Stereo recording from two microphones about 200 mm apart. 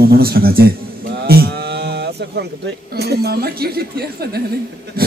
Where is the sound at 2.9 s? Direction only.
55° right (ahead or behind).